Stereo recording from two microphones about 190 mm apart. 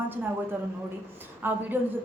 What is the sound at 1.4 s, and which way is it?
Speech, 10° right (ahead or behind).